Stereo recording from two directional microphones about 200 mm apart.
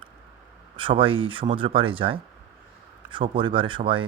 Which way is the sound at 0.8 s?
25° right (ahead or behind).